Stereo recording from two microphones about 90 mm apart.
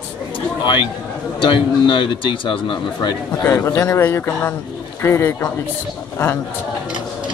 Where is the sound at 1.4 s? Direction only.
65° left (ahead or behind).